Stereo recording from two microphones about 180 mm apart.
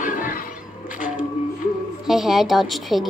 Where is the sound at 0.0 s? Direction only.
50° left (ahead or behind).